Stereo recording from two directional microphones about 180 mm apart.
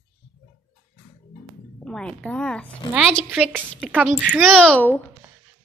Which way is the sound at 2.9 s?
5° right (ahead or behind).